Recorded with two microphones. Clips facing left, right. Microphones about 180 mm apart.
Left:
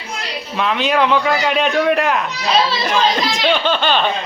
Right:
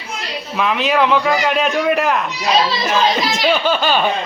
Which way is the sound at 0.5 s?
Centre (ahead or behind).